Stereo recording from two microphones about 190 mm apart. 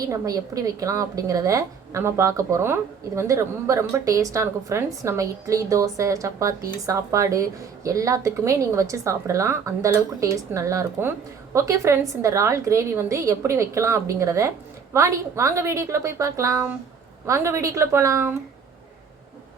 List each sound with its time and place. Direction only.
0.0 s a woman's voice: 20° right (ahead or behind)